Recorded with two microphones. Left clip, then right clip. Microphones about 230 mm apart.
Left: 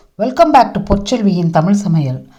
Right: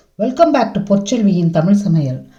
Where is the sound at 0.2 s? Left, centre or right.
Left.